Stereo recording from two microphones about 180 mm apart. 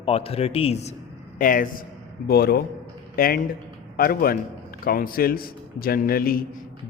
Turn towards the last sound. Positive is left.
turn(degrees=55)  # may be behind; listen again after turning